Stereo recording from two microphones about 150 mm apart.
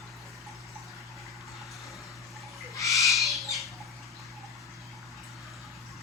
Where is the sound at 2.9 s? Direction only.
Centre (ahead or behind).